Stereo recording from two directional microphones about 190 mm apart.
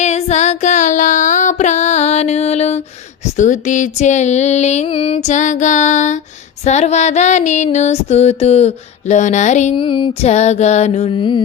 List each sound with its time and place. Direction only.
0.0 s female singing: 35° left (ahead or behind)
9.7 s female singing: 25° left (ahead or behind)